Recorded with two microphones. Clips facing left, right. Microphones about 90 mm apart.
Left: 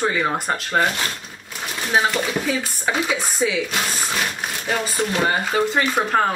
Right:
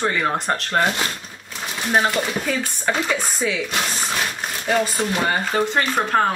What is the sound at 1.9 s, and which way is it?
Speech, 5° left (ahead or behind).